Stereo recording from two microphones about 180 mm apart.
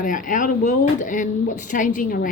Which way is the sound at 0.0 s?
45° left (ahead or behind).